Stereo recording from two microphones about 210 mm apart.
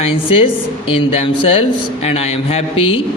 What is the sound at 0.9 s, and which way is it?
Speech, 25° left (ahead or behind).